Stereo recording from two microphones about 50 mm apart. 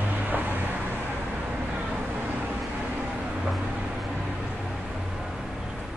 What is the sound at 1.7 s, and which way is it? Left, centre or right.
Vehicle, right.